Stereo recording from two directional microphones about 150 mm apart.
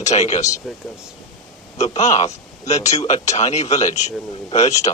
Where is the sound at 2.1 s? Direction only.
50° left (ahead or behind).